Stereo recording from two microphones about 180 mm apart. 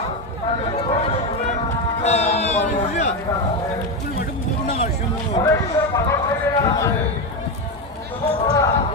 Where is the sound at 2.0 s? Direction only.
40° left (ahead or behind).